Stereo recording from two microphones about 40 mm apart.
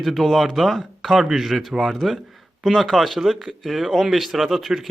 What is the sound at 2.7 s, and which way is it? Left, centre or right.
Speech, centre.